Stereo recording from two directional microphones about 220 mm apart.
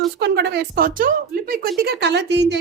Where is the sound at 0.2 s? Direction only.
50° right (ahead or behind).